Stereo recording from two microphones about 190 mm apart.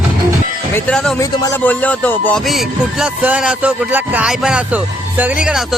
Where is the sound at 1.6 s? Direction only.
10° left (ahead or behind).